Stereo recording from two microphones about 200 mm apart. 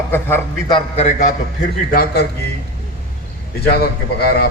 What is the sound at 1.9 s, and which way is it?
Speech, 50° left (ahead or behind).